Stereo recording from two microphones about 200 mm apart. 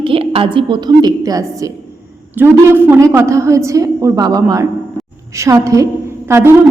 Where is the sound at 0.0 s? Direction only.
25° right (ahead or behind).